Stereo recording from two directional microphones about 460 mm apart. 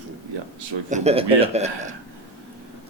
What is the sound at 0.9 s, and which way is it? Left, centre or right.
A man's voice, centre.